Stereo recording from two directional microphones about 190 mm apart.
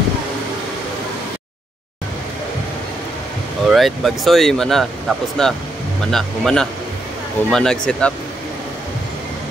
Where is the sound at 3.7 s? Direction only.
Centre (ahead or behind).